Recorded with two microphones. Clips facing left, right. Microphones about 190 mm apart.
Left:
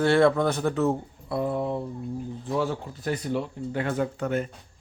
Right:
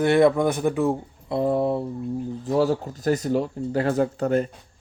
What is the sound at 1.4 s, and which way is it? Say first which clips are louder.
Speech: right 5 dB; 35° right (ahead or behind).